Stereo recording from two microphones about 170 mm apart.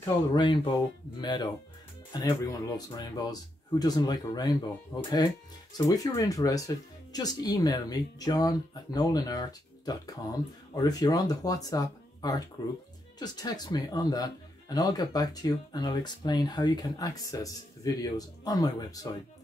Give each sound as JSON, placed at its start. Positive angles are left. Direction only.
{"t": 0.3, "sound": "speech", "side_deg": 25}